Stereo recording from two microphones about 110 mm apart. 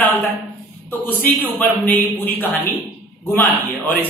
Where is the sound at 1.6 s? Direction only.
15° left (ahead or behind).